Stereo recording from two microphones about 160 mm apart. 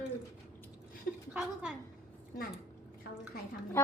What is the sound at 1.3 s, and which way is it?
Speech, 5° right (ahead or behind).